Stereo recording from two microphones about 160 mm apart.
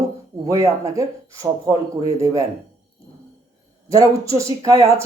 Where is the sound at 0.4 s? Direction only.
20° right (ahead or behind).